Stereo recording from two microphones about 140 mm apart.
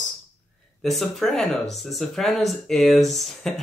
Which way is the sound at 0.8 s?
Centre (ahead or behind).